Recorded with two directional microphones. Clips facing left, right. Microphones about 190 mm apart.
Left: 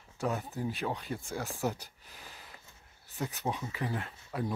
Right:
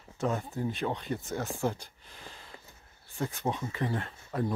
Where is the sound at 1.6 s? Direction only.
10° left (ahead or behind).